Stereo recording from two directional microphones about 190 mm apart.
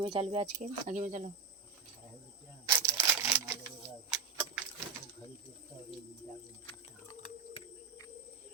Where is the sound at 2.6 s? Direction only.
15° right (ahead or behind).